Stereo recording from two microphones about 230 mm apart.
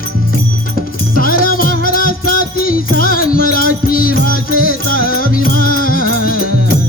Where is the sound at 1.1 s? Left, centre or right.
Left.